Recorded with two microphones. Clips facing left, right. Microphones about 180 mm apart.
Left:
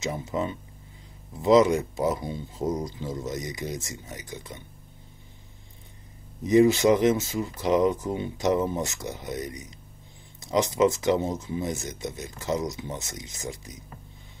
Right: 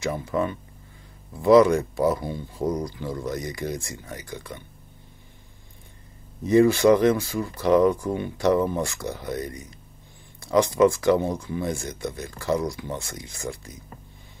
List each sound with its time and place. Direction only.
0.0 s speech: 20° left (ahead or behind)
6.4 s speech: 20° left (ahead or behind)